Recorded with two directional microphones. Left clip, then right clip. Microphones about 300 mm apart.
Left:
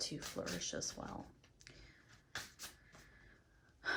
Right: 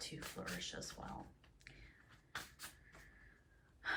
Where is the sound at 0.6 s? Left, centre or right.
Centre.